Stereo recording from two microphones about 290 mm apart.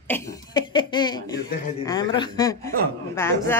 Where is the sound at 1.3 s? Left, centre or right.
Left.